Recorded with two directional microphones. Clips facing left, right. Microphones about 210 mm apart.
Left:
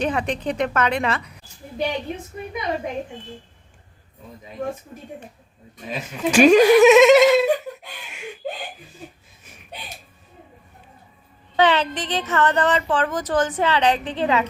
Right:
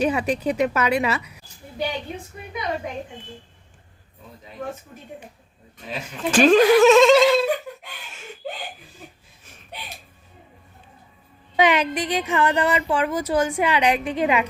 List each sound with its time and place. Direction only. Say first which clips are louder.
0.0 s a woman's voice: right 2 dB; 10° right (ahead or behind)
5.9 s speech: left 2 dB; 10° left (ahead or behind)
6.8 s a sound: left 2 dB; 20° left (ahead or behind)
11.5 s a woman's voice: even; 10° right (ahead or behind)